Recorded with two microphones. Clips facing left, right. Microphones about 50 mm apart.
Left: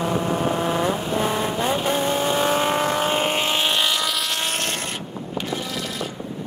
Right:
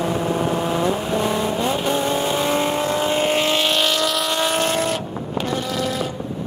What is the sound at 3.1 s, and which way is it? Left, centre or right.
Vehicle, centre.